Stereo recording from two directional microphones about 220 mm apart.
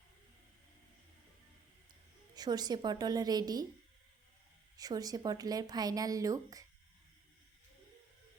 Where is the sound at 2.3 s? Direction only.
20° right (ahead or behind).